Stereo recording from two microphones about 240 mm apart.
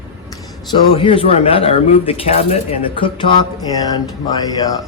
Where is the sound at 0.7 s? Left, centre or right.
Centre.